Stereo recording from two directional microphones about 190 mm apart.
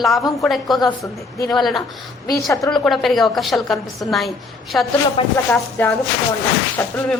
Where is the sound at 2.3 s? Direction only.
15° left (ahead or behind).